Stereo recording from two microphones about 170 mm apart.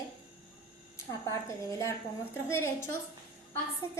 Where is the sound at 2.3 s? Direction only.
15° left (ahead or behind).